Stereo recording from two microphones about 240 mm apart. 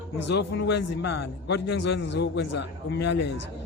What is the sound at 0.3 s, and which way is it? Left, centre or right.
A man's voice, left.